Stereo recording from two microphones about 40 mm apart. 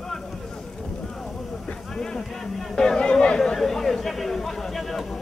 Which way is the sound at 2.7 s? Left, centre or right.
Centre.